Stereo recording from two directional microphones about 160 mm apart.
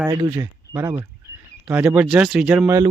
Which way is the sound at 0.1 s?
20° right (ahead or behind).